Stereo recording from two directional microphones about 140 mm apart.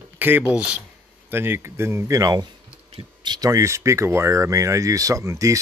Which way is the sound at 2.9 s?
40° right (ahead or behind).